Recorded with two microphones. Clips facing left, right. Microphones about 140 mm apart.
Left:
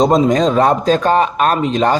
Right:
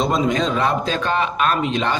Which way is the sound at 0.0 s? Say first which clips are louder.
Left 7 dB; 40° left (ahead or behind).